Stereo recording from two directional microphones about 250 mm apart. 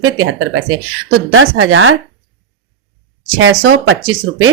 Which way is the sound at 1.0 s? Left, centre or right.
Right.